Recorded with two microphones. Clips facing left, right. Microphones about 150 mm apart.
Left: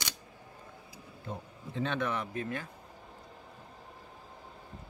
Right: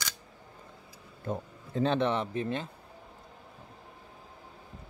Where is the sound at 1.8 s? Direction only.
30° right (ahead or behind).